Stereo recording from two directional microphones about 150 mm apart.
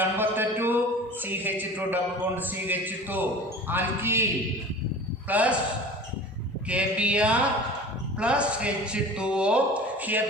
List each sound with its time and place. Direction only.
0.0 s a sound: 15° right (ahead or behind)
1.2 s a man's voice: 15° right (ahead or behind)
5.3 s a man's voice: 10° right (ahead or behind)
6.7 s a man's voice: 10° right (ahead or behind)